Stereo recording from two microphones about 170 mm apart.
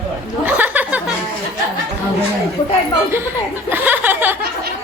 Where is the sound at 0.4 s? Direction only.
10° right (ahead or behind).